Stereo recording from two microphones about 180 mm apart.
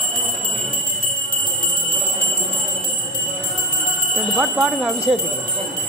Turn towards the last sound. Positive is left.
turn(degrees=0)  # may be behind; listen again after turning